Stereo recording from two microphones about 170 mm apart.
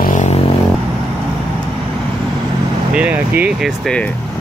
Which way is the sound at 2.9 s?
10° right (ahead or behind).